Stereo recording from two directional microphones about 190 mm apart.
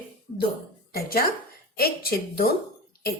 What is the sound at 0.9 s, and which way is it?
A woman's voice, 50° left (ahead or behind).